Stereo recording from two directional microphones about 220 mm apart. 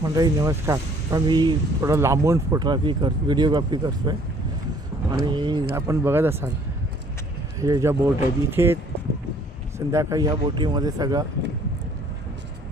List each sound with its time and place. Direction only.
0.0 s speech: 15° right (ahead or behind)
5.2 s speech: 20° right (ahead or behind)
7.6 s speech: 15° right (ahead or behind)
9.8 s speech: 15° right (ahead or behind)